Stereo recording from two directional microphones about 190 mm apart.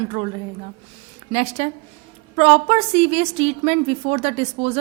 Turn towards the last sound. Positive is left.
turn(degrees=-35)  # may be behind; listen again after turning